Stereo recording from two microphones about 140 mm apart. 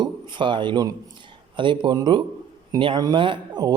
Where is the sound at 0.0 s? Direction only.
35° right (ahead or behind).